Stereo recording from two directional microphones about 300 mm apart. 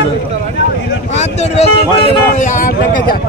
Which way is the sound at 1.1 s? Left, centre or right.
Left.